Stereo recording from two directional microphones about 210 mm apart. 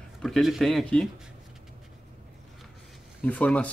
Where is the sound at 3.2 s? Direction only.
5° left (ahead or behind).